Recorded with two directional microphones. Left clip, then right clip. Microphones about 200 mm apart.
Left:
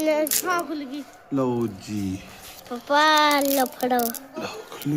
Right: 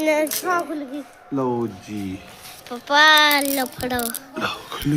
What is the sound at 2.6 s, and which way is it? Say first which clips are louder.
Speech: right 5 dB; 20° left (ahead or behind).